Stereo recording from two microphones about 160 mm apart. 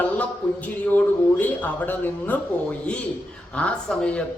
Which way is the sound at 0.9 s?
10° left (ahead or behind).